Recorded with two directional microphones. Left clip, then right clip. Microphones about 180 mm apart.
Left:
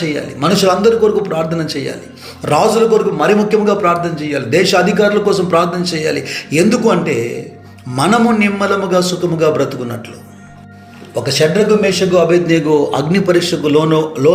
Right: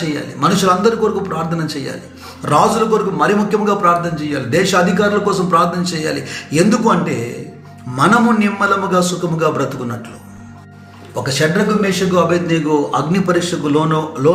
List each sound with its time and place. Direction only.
0.1 s a man's voice: 15° left (ahead or behind)
11.1 s a man's voice: 15° left (ahead or behind)